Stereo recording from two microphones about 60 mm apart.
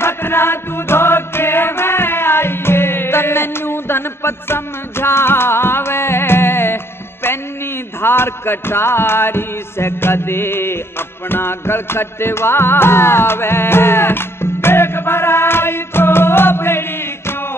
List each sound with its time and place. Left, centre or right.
0.0 s music: left